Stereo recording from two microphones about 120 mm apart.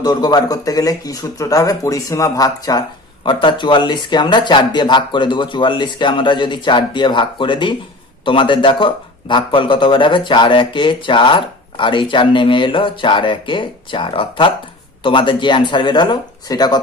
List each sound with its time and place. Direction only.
0.0 s speech: 35° left (ahead or behind)